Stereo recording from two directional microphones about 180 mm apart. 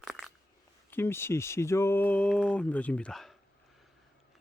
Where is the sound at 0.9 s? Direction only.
15° left (ahead or behind).